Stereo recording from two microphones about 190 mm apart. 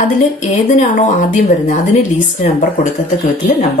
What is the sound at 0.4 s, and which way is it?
A woman's voice, 40° left (ahead or behind).